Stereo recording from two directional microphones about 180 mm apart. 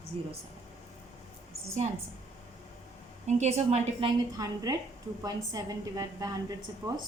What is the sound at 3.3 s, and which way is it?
A woman's voice, 40° right (ahead or behind).